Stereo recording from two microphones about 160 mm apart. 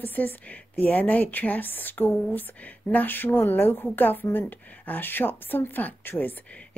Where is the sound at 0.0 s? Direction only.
10° left (ahead or behind).